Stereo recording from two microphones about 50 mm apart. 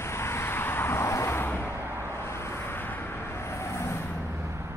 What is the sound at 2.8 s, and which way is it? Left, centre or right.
Vehicle, left.